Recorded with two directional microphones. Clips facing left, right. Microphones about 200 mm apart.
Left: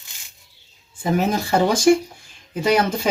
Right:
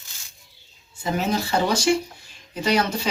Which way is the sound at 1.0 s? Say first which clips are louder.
Left 4 dB; 50° left (ahead or behind).